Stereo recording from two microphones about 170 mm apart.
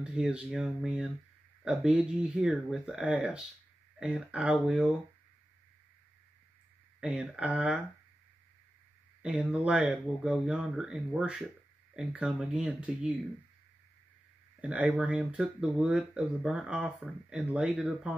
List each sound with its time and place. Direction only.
0.0 s speech: 5° right (ahead or behind)
7.0 s speech: 5° right (ahead or behind)
9.2 s speech: 5° right (ahead or behind)
14.6 s speech: 10° right (ahead or behind)